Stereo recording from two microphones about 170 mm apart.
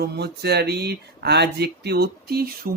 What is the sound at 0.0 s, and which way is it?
Speech, 70° right (ahead or behind).